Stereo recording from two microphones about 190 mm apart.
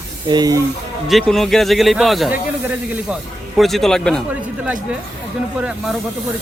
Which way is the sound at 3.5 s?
Centre (ahead or behind).